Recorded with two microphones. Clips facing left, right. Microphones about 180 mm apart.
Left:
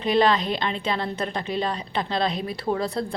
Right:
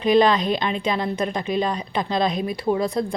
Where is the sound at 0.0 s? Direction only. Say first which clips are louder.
Right 3 dB; 15° right (ahead or behind).